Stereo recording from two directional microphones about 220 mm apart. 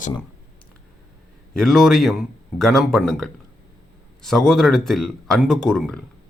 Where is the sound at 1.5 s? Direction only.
Centre (ahead or behind).